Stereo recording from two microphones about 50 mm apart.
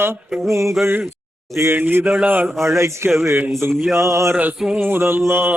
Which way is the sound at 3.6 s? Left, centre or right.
Right.